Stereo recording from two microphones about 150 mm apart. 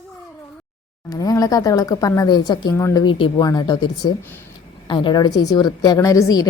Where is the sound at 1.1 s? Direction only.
25° left (ahead or behind).